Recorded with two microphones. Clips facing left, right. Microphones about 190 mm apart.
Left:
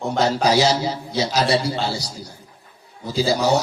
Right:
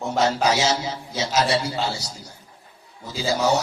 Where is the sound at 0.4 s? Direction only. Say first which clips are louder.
Left 4 dB; 35° left (ahead or behind).